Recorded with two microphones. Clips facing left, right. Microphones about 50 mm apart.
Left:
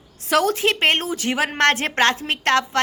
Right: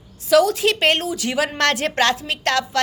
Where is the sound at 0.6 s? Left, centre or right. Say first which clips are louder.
Right 1 dB; left.